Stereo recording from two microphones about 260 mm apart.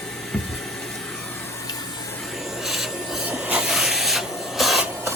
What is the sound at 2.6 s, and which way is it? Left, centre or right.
Rub, centre.